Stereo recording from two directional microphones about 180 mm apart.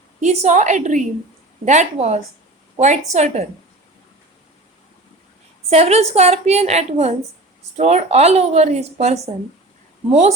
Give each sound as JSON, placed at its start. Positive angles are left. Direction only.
{"t": 0.2, "sound": "speech", "side_deg": -40}
{"t": 5.7, "sound": "speech", "side_deg": -35}